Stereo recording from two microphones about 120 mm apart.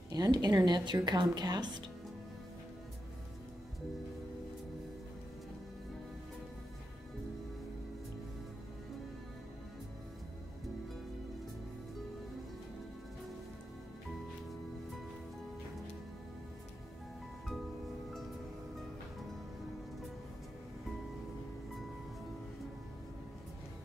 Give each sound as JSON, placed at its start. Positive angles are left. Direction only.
{"t": 0.1, "sound": "speech", "side_deg": -35}